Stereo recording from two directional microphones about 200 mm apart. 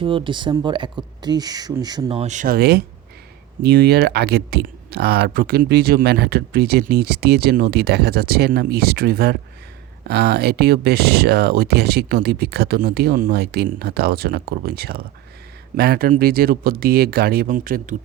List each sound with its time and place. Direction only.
0.0 s speech: 25° right (ahead or behind); by 17.9 s 45° right (ahead or behind)